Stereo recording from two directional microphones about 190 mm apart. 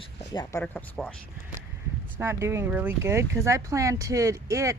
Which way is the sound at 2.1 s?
15° right (ahead or behind).